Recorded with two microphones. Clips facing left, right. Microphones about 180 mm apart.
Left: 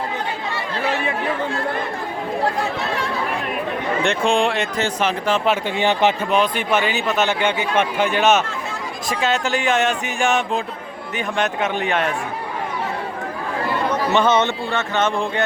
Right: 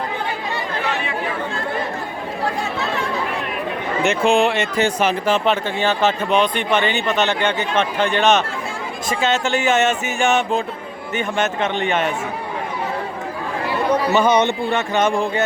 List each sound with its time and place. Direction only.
4.0 s speech: 5° right (ahead or behind)
5.6 s a man's voice: 15° left (ahead or behind)
6.3 s a man's voice: 5° left (ahead or behind)
13.9 s speech: 10° right (ahead or behind)